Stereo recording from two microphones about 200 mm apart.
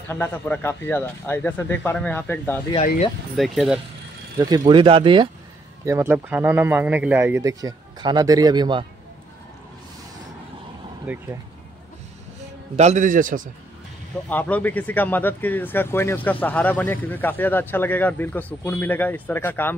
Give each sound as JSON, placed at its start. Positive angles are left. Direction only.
{"t": 0.1, "sound": "speech", "side_deg": 10}
{"t": 4.4, "sound": "speech", "side_deg": -20}
{"t": 5.9, "sound": "speech", "side_deg": -10}
{"t": 11.1, "sound": "speech", "side_deg": -10}
{"t": 12.7, "sound": "a man's voice", "side_deg": -35}
{"t": 14.3, "sound": "speech", "side_deg": 10}